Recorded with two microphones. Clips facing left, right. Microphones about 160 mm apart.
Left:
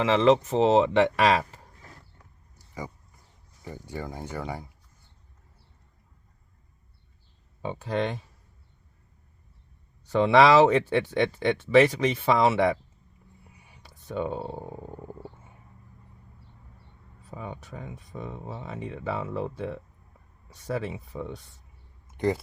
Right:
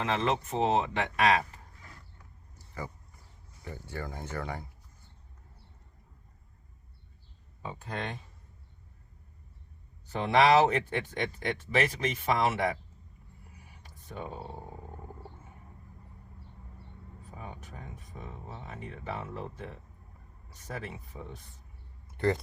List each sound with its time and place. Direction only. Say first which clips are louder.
0.0 s speech: left 9 dB; 90° left
3.6 s speech: left 3 dB; 15° left (ahead or behind)
7.6 s speech: left 9 dB; 90° left
10.1 s speech: left 5 dB; 75° left (ahead or behind)
13.8 s a sound: left 10 dB; 75° left (ahead or behind)
17.3 s speech: left 7 dB; 85° left
22.0 s a sound: left 2 dB; 15° left (ahead or behind)